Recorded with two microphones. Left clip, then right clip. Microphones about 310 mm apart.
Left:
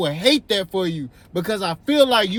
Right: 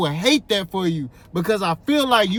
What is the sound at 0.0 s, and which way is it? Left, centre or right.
Speech, centre.